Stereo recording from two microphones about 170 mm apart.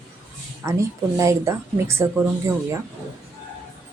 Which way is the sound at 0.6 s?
15° right (ahead or behind).